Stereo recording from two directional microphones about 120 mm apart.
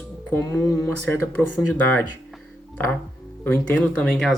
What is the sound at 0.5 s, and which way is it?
Speech, 20° left (ahead or behind).